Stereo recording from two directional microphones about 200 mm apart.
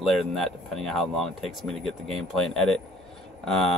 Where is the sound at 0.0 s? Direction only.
Centre (ahead or behind).